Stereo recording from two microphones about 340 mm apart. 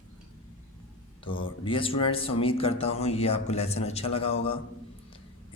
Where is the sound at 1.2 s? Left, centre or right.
Centre.